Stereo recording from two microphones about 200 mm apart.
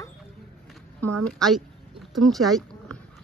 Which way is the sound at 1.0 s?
5° left (ahead or behind).